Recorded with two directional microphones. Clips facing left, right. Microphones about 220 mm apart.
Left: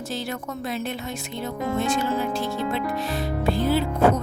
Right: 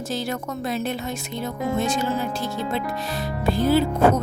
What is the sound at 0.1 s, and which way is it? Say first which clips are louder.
Speech: right 3 dB; 40° right (ahead or behind).